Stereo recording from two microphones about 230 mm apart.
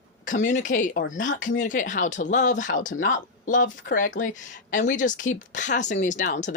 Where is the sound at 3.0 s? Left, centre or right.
Left.